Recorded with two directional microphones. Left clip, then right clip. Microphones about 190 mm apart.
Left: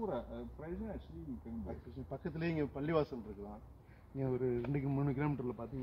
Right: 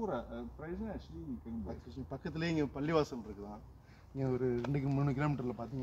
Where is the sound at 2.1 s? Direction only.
5° left (ahead or behind).